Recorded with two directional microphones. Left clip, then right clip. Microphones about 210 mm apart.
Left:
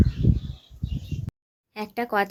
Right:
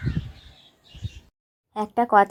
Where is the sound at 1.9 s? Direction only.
5° left (ahead or behind).